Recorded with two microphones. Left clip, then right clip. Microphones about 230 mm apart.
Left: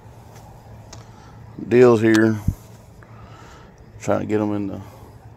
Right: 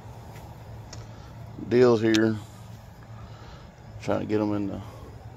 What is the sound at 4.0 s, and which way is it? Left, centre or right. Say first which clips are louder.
Speech: left 5 dB; left.